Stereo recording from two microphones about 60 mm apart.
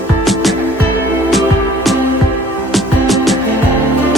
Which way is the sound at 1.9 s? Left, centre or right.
Centre.